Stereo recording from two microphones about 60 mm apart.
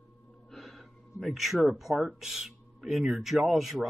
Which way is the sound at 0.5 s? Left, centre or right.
Centre.